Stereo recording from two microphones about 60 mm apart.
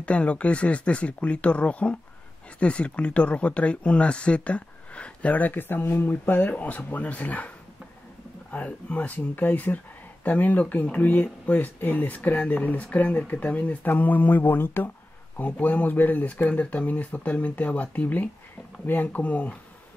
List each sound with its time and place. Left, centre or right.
0.0 s speech: left